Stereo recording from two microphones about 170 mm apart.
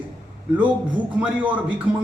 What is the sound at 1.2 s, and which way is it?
Speech, 10° right (ahead or behind).